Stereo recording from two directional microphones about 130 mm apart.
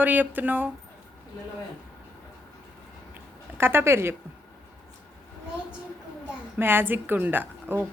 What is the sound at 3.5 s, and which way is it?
Speech, 20° right (ahead or behind).